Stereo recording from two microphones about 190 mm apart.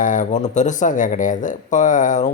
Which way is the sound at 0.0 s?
40° left (ahead or behind).